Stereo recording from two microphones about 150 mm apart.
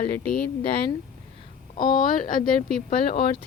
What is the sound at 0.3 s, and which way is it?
Speech, 5° left (ahead or behind).